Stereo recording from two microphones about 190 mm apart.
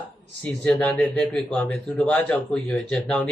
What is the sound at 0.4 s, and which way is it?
Speech, 5° left (ahead or behind).